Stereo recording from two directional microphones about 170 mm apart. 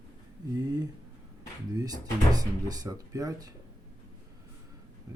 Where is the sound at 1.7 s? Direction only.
20° right (ahead or behind).